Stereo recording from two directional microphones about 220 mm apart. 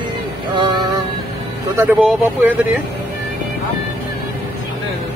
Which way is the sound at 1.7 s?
5° right (ahead or behind).